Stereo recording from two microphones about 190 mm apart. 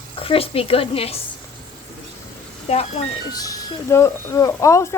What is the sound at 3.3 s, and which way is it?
Speech, 20° left (ahead or behind).